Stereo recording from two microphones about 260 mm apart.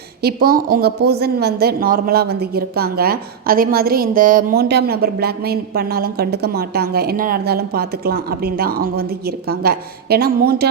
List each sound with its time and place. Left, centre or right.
0.2 s a woman's voice: right